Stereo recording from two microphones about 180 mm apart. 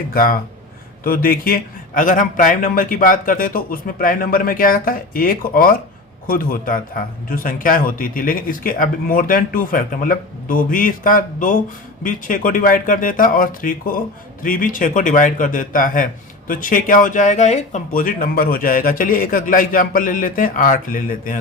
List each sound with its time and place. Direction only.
0.1 s speech: 55° left (ahead or behind)